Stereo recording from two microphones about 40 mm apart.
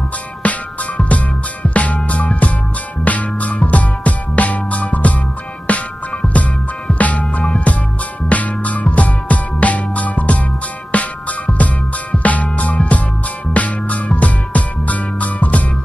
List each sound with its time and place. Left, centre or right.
0.4 s music: left
6.2 s music: centre
7.0 s music: left